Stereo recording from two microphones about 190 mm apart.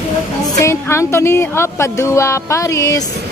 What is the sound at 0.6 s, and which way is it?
Speech, 15° left (ahead or behind).